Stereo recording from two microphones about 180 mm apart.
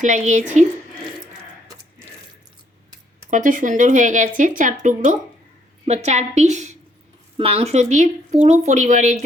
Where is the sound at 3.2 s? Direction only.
45° right (ahead or behind).